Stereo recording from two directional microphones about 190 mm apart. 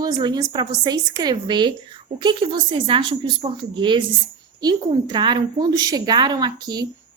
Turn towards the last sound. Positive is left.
turn(degrees=-20)  # may be behind; listen again after turning